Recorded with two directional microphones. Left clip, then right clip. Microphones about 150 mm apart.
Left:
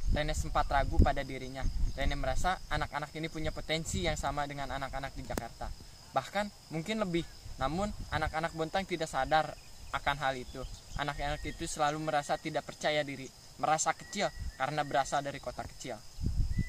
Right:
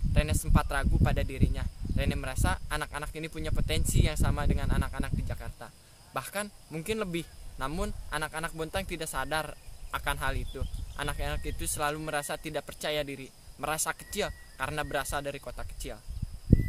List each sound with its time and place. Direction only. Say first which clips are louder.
0.1 s speech: right 1 dB; 40° right (ahead or behind)